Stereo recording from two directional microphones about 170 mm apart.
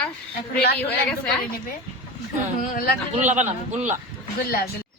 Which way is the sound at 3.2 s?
45° right (ahead or behind).